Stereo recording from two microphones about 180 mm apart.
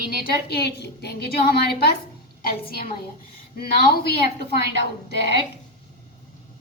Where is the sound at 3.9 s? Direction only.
60° left (ahead or behind).